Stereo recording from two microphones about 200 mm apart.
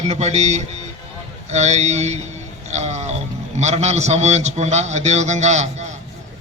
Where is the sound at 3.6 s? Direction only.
35° right (ahead or behind).